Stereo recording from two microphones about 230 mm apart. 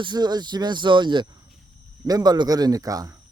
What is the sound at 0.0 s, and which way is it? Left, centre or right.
A man's voice, centre.